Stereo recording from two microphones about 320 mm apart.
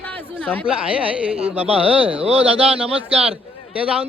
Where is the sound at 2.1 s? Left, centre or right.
Centre.